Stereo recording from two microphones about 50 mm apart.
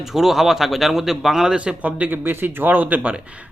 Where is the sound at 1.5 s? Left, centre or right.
Right.